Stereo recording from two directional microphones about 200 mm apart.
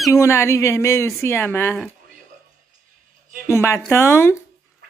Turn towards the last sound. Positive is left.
turn(degrees=10)  # may be behind; listen again after turning